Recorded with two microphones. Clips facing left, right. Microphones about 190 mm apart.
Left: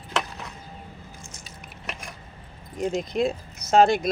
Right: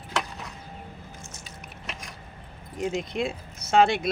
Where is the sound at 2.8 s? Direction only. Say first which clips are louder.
Left 4 dB; 40° left (ahead or behind).